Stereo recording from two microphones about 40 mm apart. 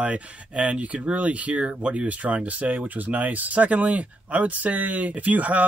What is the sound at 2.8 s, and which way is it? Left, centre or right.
Speech, right.